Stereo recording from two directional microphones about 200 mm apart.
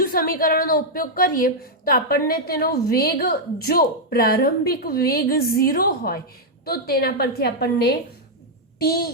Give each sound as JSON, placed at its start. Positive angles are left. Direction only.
{"t": 0.0, "sound": "a woman's voice", "side_deg": 45}